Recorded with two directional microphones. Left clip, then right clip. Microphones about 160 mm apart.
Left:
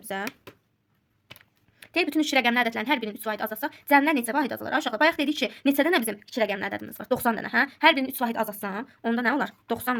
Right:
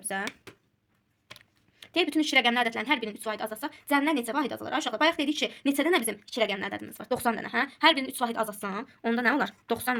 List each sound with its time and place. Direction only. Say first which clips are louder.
0.1 s speech: left 1 dB; 30° left (ahead or behind)
1.8 s a woman's voice: left 2 dB; 35° left (ahead or behind)
9.0 s a woman's voice: even; 15° left (ahead or behind)